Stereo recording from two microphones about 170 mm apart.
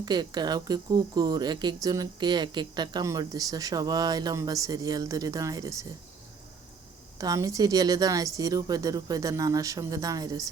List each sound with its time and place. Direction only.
0.0 s speech: 25° right (ahead or behind)
7.2 s speech: 20° right (ahead or behind)